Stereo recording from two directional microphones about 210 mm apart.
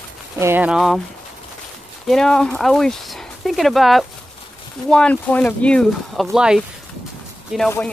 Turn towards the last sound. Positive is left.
turn(degrees=0)  # may be behind; listen again after turning